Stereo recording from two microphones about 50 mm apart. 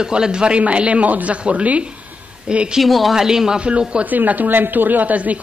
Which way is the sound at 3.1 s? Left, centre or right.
Centre.